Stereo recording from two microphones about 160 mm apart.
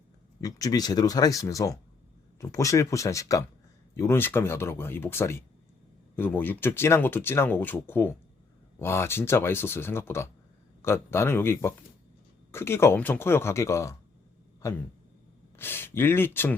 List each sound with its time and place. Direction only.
0.4 s speech: 25° left (ahead or behind)